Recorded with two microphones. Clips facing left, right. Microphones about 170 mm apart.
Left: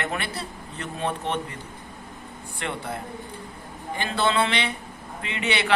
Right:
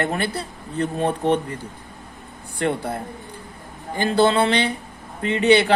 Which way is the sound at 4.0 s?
35° right (ahead or behind).